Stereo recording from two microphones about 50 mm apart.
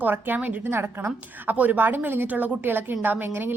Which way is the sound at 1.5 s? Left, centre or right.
Right.